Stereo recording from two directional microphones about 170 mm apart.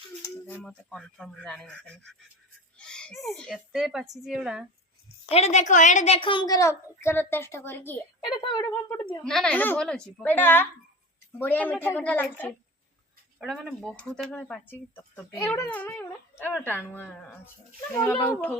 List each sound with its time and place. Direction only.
0.2 s a woman's voice: 10° left (ahead or behind)
5.3 s a woman's voice: 40° left (ahead or behind)
6.1 s a child's voice: 30° left (ahead or behind); by 8.0 s 10° left (ahead or behind)
8.3 s a woman's voice: 25° left (ahead or behind)
8.7 s a child's voice: 10° left (ahead or behind)